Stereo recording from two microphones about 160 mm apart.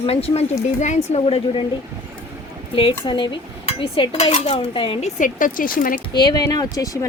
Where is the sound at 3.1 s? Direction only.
30° left (ahead or behind).